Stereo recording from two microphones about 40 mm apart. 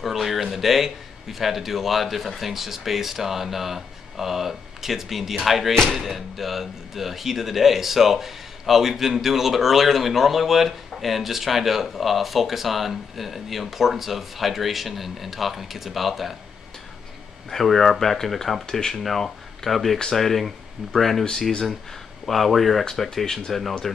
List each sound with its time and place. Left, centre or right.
0.0 s speech: centre
17.5 s speech: centre
23.0 s speech: centre